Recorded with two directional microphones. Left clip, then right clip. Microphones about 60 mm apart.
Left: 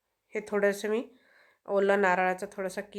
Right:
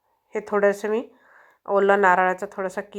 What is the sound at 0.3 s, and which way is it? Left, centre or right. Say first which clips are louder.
Speech: right 7 dB; centre.